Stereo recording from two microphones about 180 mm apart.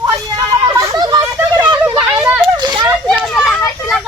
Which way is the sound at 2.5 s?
25° right (ahead or behind).